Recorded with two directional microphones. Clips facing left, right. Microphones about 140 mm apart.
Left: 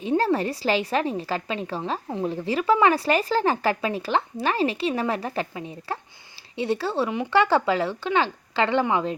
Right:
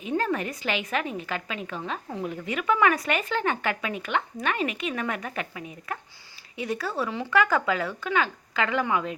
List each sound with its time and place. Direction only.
0.0 s speech: 30° left (ahead or behind)